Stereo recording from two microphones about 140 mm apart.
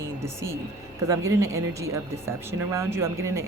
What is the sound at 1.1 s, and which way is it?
Speech, 20° right (ahead or behind).